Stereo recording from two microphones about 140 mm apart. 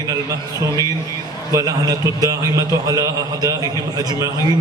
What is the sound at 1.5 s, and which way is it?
A man's voice, 25° right (ahead or behind).